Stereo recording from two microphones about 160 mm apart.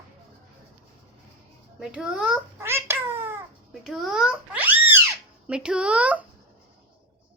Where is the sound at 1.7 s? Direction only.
5° right (ahead or behind).